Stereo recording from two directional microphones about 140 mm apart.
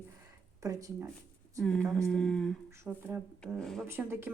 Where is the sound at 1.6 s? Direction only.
5° left (ahead or behind).